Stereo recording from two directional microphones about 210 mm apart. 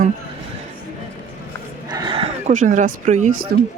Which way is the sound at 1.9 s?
20° right (ahead or behind).